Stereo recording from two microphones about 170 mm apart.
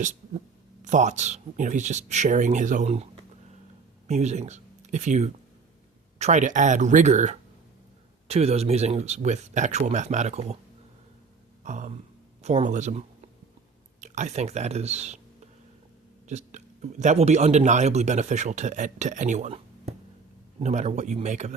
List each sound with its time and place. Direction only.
0.9 s a man's voice: 45° right (ahead or behind)
4.1 s a man's voice: 45° right (ahead or behind)
11.6 s a sound: 45° right (ahead or behind)
12.4 s speech: 40° right (ahead or behind)
16.2 s a man's voice: 45° right (ahead or behind)